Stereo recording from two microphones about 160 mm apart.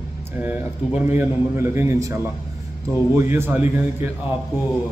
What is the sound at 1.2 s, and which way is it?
A man's voice, 15° right (ahead or behind).